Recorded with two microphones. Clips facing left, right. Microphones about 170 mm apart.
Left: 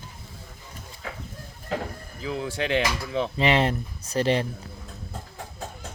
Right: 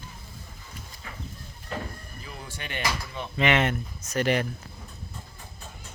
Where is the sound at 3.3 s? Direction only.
30° left (ahead or behind).